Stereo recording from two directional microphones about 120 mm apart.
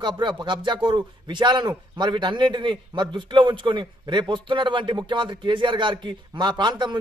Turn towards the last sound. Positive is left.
turn(degrees=-40)  # may be behind; listen again after turning